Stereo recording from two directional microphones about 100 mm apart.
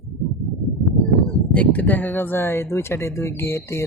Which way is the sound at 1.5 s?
15° left (ahead or behind).